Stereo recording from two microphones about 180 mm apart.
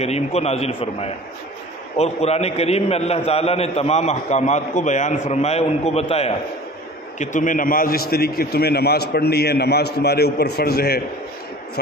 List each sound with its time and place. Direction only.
0.0 s a man's voice: 35° left (ahead or behind)
7.2 s a man's voice: 45° left (ahead or behind)